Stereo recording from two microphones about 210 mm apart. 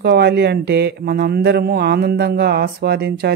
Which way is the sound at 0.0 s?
50° right (ahead or behind).